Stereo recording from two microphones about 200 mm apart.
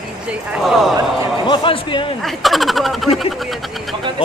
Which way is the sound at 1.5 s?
25° left (ahead or behind).